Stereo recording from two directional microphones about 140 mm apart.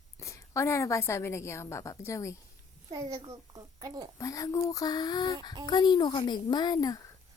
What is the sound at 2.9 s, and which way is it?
A child's voice, 25° right (ahead or behind).